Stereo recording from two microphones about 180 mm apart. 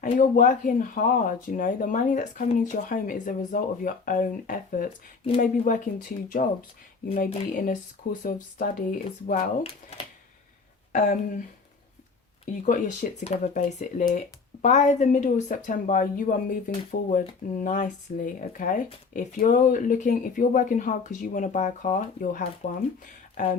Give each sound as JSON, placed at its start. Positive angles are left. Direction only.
{"t": 0.0, "sound": "speech", "side_deg": 45}
{"t": 9.4, "sound": "speech", "side_deg": 30}
{"t": 10.9, "sound": "speech", "side_deg": 45}
{"t": 12.6, "sound": "speech", "side_deg": 45}